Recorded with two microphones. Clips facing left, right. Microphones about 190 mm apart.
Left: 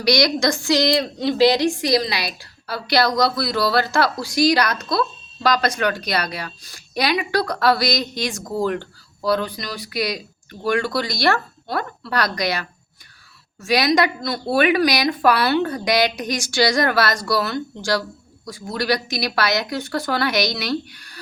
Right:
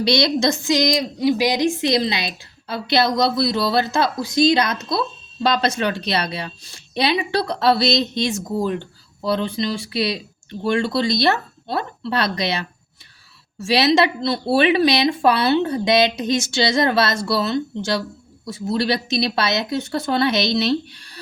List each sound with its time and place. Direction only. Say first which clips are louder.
0.0 s a woman's voice: even; 25° right (ahead or behind)